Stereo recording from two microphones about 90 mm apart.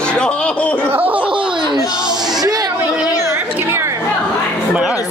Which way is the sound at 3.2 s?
30° right (ahead or behind).